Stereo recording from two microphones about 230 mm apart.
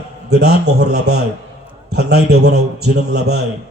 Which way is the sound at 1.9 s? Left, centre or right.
Right.